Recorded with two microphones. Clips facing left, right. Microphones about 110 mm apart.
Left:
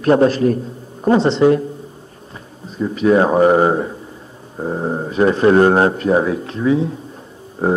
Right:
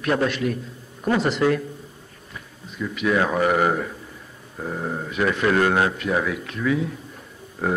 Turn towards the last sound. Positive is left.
turn(degrees=30)  # may be behind; listen again after turning